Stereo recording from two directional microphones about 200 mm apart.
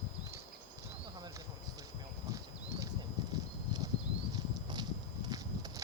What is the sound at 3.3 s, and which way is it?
Clip-clop, 20° right (ahead or behind).